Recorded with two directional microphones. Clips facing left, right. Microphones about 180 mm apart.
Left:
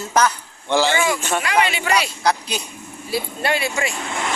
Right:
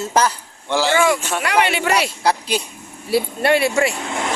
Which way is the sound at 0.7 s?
5° right (ahead or behind).